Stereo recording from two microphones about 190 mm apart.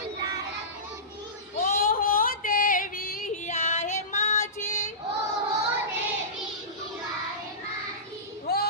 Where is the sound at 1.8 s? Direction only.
50° left (ahead or behind).